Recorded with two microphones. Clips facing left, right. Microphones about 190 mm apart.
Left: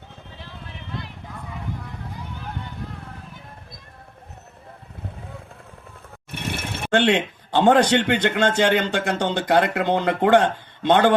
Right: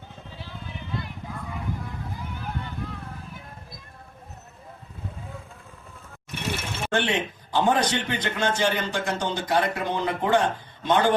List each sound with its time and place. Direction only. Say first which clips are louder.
6.3 s speech: left 1 dB; 55° left (ahead or behind)